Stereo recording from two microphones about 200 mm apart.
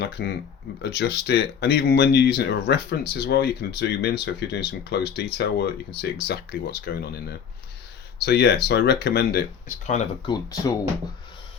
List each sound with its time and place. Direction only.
0.0 s speech: 55° left (ahead or behind)
9.8 s speech: 35° left (ahead or behind)